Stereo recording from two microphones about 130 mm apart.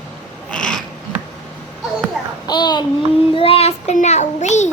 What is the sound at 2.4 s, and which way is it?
Child singing, 35° left (ahead or behind).